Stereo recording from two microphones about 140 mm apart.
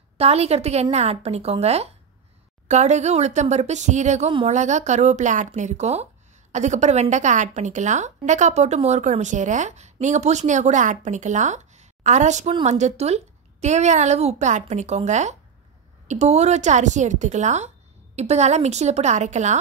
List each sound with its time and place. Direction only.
0.2 s a woman's voice: 50° right (ahead or behind)